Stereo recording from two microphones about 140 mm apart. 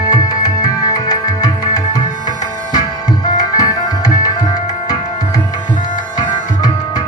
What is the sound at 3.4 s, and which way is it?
Tabla, 25° left (ahead or behind).